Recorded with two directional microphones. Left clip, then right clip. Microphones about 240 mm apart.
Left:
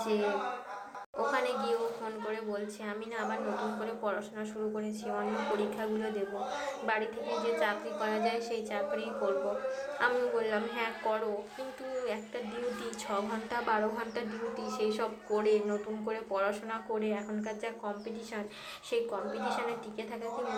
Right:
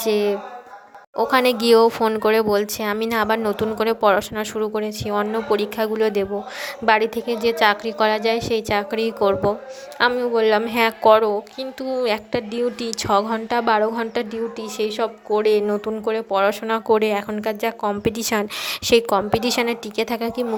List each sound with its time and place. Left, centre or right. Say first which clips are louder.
0.0 s a woman's voice: right 11 dB; right